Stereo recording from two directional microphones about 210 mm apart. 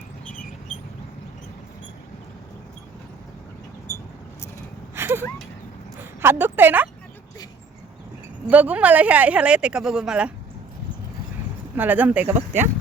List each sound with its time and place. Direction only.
4.9 s a sound: 10° right (ahead or behind)
6.0 s speech: 10° right (ahead or behind)
8.4 s speech: 5° right (ahead or behind)
11.8 s speech: 10° right (ahead or behind)